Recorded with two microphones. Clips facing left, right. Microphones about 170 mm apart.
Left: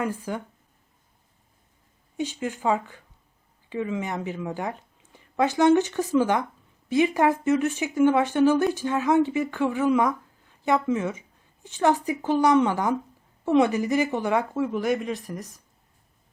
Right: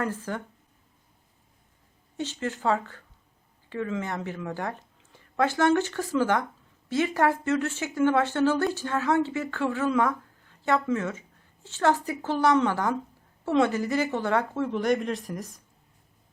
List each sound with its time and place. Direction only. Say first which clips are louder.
0.0 s speech: left 2 dB; 10° left (ahead or behind)
2.1 s a woman's voice: left 2 dB; 15° left (ahead or behind)